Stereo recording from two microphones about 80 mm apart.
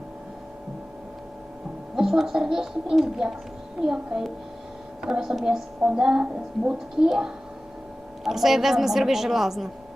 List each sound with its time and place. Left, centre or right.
2.0 s a woman's voice: centre